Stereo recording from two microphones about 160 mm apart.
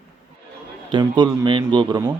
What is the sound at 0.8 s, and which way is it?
Speech, 30° right (ahead or behind).